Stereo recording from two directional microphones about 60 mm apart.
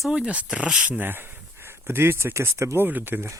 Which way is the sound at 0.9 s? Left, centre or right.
Right.